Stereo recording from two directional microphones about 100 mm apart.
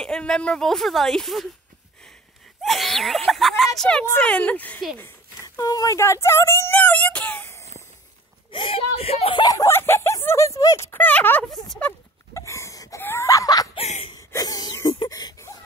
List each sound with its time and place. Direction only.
0.0 s speech: 5° left (ahead or behind)
2.6 s speech: centre (ahead or behind); by 4.8 s 15° left (ahead or behind)
4.9 s a sound: 20° left (ahead or behind)
5.6 s speech: 35° left (ahead or behind)
8.5 s speech: 60° left (ahead or behind); by 9.4 s 80° left
9.4 s speech: 35° left (ahead or behind)
9.7 s speech: 25° left (ahead or behind)
10.9 s speech: 15° left (ahead or behind)
12.4 s a sound: 30° left (ahead or behind)
13.7 s a sound: 85° left
14.1 s cough: 40° left (ahead or behind)
14.9 s a sound: 45° left (ahead or behind)